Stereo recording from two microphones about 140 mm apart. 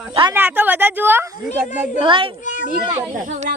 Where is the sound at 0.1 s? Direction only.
35° right (ahead or behind).